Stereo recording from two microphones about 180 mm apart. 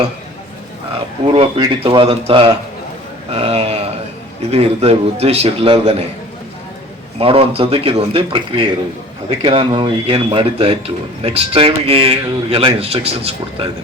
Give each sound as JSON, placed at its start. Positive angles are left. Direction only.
{"t": 1.2, "sound": "speech", "side_deg": -30}
{"t": 3.3, "sound": "a sound", "side_deg": -35}
{"t": 4.5, "sound": "speech", "side_deg": -35}
{"t": 7.2, "sound": "speech", "side_deg": -30}